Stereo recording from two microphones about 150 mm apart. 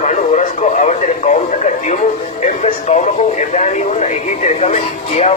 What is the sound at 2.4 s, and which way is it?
Speech, 50° left (ahead or behind).